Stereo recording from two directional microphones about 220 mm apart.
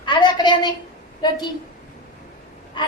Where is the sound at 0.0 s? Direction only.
20° left (ahead or behind).